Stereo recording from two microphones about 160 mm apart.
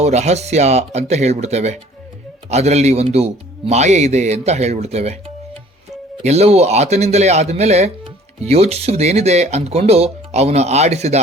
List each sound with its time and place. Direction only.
0.0 s speech: 45° right (ahead or behind)
6.2 s speech: 40° right (ahead or behind)